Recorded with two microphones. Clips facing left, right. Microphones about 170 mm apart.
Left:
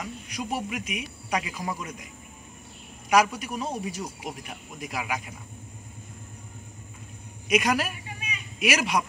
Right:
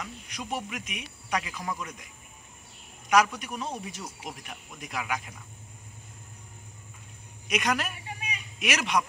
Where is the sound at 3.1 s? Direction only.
10° left (ahead or behind).